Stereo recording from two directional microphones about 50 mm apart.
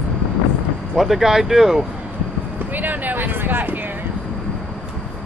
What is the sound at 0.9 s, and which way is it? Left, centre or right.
Speech, centre.